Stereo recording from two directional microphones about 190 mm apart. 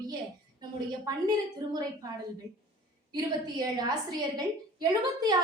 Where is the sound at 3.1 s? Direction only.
20° right (ahead or behind).